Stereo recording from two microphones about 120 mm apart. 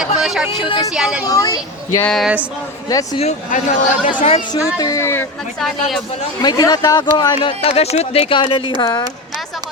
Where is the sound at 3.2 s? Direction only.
65° left (ahead or behind).